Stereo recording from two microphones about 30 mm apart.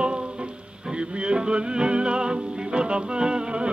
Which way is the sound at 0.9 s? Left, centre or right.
Right.